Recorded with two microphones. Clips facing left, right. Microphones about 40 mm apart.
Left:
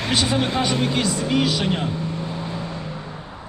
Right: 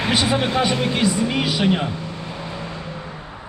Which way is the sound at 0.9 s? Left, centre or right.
Centre.